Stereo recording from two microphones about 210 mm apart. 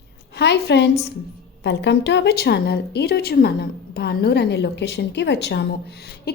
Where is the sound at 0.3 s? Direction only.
50° left (ahead or behind).